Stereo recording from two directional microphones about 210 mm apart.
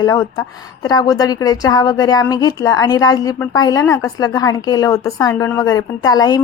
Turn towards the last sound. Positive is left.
turn(degrees=20)  # may be behind; listen again after turning